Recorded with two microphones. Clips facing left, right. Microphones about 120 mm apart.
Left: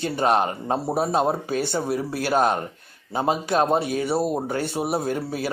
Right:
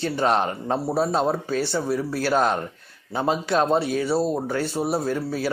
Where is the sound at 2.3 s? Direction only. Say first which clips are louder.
Left 1 dB; 45° left (ahead or behind).